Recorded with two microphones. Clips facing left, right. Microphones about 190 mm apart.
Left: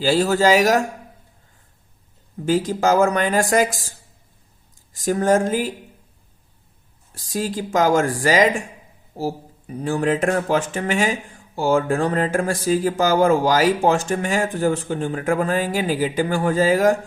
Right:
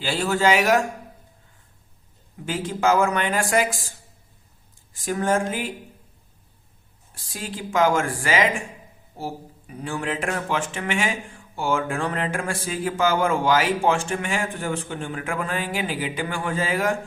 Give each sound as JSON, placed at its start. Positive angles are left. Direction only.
{"t": 0.0, "sound": "speech", "side_deg": 40}
{"t": 2.5, "sound": "speech", "side_deg": 40}
{"t": 4.9, "sound": "speech", "side_deg": 40}
{"t": 7.1, "sound": "speech", "side_deg": 40}